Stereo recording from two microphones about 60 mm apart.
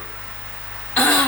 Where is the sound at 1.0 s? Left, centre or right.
Centre.